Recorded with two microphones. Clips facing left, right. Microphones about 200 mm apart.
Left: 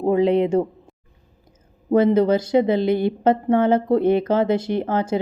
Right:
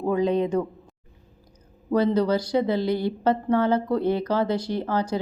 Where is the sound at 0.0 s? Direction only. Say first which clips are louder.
Left 5 dB; 30° left (ahead or behind).